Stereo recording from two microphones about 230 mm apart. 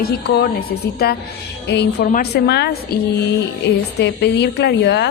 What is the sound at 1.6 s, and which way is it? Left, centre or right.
A woman's voice, left.